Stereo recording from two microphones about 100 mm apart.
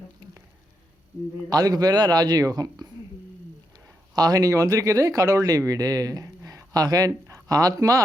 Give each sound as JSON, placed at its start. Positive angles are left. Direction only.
{"t": 1.5, "sound": "speech", "side_deg": -40}
{"t": 4.1, "sound": "speech", "side_deg": -40}